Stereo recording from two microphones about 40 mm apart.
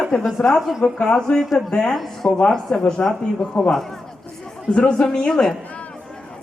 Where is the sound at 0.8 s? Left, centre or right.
Left.